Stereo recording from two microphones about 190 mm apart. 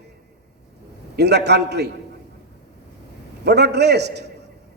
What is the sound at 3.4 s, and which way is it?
Speech, 60° right (ahead or behind).